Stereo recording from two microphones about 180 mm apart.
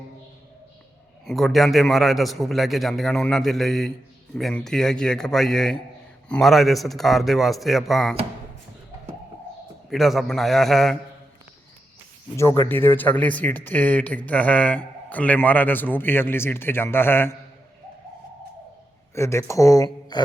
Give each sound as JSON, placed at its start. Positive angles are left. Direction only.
{"t": 1.2, "sound": "a man's voice", "side_deg": 0}
{"t": 9.9, "sound": "a man's voice", "side_deg": 0}
{"t": 12.4, "sound": "speech", "side_deg": 15}
{"t": 19.1, "sound": "speech", "side_deg": 15}